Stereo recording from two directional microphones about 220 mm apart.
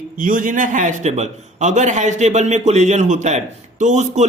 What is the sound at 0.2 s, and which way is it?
A man's voice, 40° right (ahead or behind).